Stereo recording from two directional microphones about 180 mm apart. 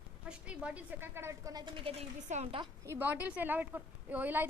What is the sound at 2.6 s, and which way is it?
A woman's voice, 15° right (ahead or behind).